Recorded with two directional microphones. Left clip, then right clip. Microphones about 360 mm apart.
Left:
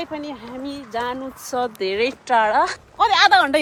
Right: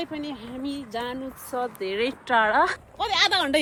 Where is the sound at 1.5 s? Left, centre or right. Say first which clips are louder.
Left 6 dB; left.